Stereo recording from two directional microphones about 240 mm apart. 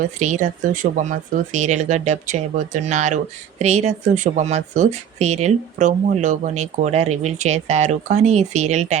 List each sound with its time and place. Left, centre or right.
0.0 s speech: right